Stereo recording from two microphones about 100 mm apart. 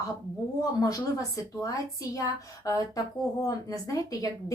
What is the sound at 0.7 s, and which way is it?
Speech, 35° left (ahead or behind).